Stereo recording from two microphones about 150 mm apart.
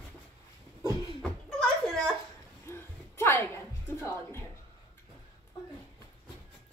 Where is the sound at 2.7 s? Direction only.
15° left (ahead or behind).